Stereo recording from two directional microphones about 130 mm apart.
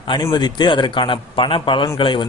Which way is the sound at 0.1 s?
35° left (ahead or behind).